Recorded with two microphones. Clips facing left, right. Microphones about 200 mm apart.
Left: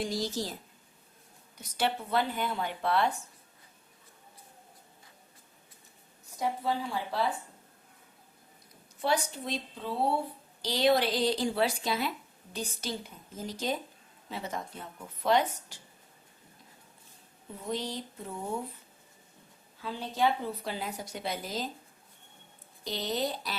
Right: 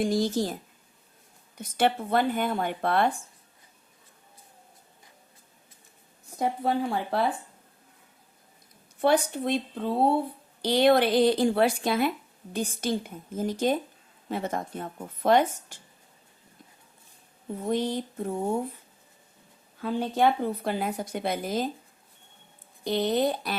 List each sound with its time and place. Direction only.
0.0 s speech: 50° right (ahead or behind)
6.4 s a woman's voice: 55° right (ahead or behind)
9.0 s a woman's voice: 55° right (ahead or behind)
17.5 s speech: 55° right (ahead or behind)
19.8 s a woman's voice: 55° right (ahead or behind)
22.8 s a woman's voice: 55° right (ahead or behind)